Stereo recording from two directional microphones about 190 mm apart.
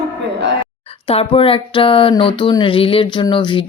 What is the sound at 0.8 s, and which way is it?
Speech, 30° left (ahead or behind).